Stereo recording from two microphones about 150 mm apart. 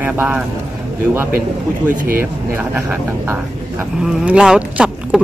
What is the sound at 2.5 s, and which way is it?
Speech, 10° right (ahead or behind).